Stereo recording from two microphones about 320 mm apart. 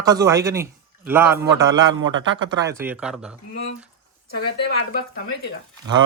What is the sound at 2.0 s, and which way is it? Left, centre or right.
Speech, right.